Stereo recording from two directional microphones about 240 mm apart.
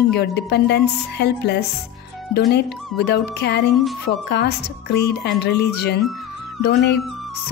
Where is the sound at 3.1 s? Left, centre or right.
Left.